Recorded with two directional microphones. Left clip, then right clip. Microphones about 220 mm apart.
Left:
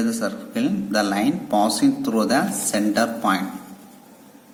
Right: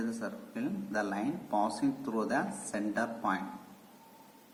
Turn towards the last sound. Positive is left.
turn(degrees=55)  # may be behind; listen again after turning